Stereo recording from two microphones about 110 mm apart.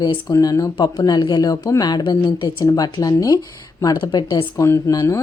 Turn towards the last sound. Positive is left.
turn(degrees=30)  # may be behind; listen again after turning